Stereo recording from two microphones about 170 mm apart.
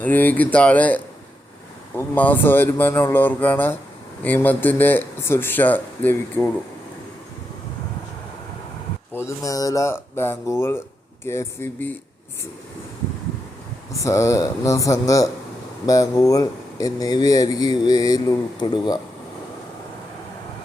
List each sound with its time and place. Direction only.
0.0 s speech: 10° left (ahead or behind)
9.1 s speech: 20° left (ahead or behind)
14.0 s speech: 15° left (ahead or behind)